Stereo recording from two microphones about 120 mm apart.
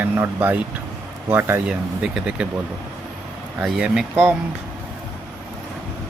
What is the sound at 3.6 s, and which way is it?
Speech, 5° right (ahead or behind).